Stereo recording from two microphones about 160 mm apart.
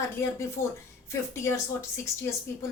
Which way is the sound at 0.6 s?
60° left (ahead or behind).